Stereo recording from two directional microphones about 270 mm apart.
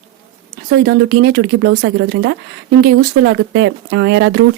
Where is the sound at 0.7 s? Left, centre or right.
Right.